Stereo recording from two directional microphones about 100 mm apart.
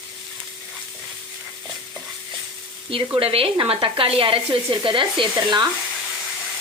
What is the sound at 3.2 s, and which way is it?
Speech, 70° right (ahead or behind).